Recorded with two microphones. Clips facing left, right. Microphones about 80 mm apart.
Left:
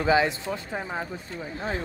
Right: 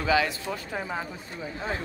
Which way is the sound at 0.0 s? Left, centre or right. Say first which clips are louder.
Left 3 dB; left.